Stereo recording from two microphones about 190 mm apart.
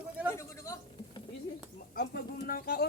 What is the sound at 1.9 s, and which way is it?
Speech, 50° left (ahead or behind).